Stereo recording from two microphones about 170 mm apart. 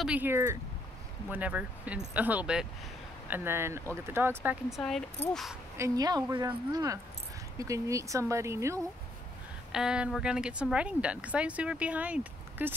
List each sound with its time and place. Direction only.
0.0 s speech: 10° right (ahead or behind)
4.8 s speech: 5° left (ahead or behind)
5.8 s speech: 25° right (ahead or behind)
9.7 s speech: 5° right (ahead or behind)